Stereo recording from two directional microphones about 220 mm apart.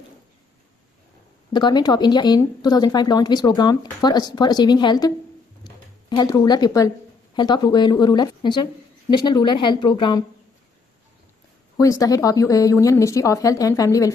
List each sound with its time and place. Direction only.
1.5 s speech: 20° left (ahead or behind)
5.6 s a sound: 20° left (ahead or behind)
7.3 s speech: 20° left (ahead or behind)
11.7 s speech: 15° left (ahead or behind)